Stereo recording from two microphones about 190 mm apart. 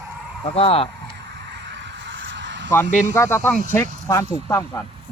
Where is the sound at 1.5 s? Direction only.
65° right (ahead or behind).